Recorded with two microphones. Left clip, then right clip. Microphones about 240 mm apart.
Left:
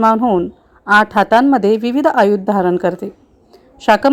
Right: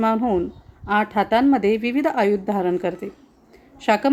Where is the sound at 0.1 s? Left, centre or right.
Centre.